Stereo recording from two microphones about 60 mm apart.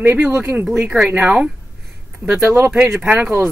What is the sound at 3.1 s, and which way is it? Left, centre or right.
Speech, right.